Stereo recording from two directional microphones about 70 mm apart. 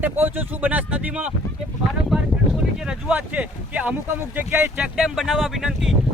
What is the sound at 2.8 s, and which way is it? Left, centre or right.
Speech, centre.